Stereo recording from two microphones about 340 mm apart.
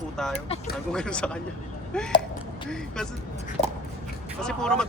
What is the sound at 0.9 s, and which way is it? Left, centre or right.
Speech, centre.